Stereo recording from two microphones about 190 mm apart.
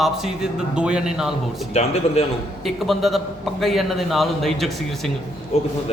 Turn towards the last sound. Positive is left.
turn(degrees=35)  # may be behind; listen again after turning